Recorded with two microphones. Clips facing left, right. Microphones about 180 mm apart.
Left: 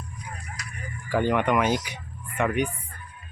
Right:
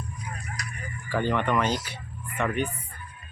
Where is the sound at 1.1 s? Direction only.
15° left (ahead or behind).